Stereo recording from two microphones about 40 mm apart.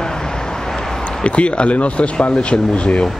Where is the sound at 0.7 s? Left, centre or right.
Centre.